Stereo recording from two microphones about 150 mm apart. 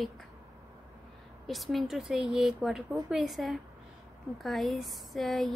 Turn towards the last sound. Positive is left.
turn(degrees=0)  # may be behind; listen again after turning